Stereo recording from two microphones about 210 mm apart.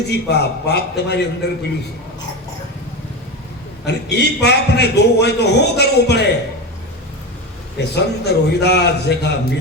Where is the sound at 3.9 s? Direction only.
50° left (ahead or behind).